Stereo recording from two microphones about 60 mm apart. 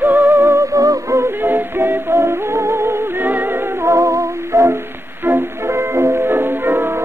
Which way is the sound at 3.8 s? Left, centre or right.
Right.